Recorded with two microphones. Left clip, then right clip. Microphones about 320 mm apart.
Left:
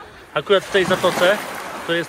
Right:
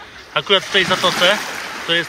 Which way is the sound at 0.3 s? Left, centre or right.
Centre.